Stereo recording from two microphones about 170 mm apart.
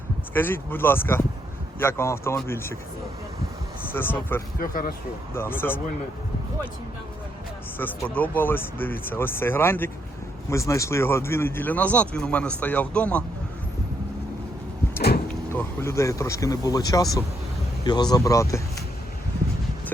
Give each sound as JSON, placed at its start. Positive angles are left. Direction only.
{"t": 0.3, "sound": "speech", "side_deg": 10}
{"t": 3.9, "sound": "speech", "side_deg": 10}
{"t": 4.5, "sound": "speech", "side_deg": 55}
{"t": 5.3, "sound": "speech", "side_deg": 15}
{"t": 7.8, "sound": "speech", "side_deg": 10}
{"t": 15.3, "sound": "speech", "side_deg": 15}